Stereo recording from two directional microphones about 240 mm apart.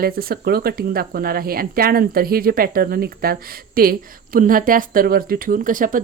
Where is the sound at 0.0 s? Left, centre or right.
Right.